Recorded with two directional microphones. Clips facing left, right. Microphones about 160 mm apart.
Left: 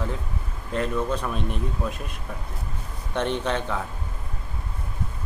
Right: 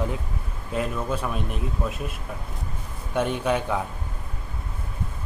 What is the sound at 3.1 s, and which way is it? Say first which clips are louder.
Speech: right 2 dB; 10° right (ahead or behind).